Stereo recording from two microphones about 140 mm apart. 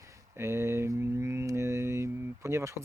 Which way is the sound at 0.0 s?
20° right (ahead or behind).